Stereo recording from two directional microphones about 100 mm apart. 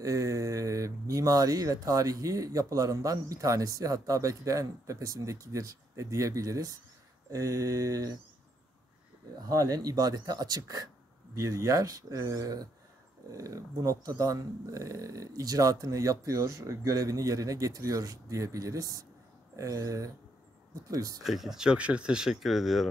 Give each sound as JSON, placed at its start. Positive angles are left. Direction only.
{"t": 0.0, "sound": "speech", "side_deg": -35}
{"t": 9.5, "sound": "speech", "side_deg": -35}
{"t": 21.2, "sound": "speech", "side_deg": 0}